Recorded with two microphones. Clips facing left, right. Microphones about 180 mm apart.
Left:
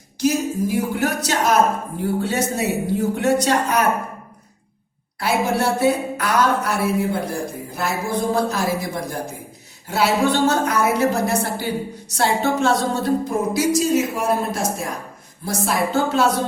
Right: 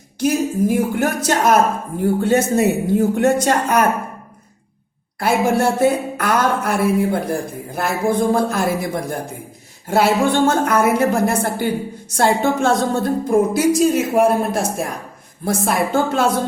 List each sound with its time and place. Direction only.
0.2 s speech: 50° right (ahead or behind)
5.2 s speech: 50° right (ahead or behind)